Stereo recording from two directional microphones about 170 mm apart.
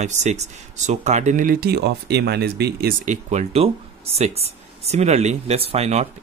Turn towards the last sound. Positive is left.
turn(degrees=-40)  # may be behind; listen again after turning